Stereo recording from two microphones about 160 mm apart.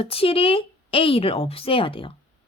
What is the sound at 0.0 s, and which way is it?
Speech, 35° left (ahead or behind).